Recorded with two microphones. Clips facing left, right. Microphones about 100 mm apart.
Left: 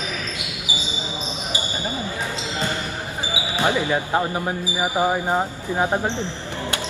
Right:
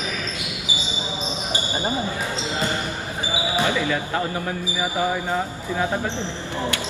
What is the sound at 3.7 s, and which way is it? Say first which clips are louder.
Speech: left 2 dB; 25° left (ahead or behind).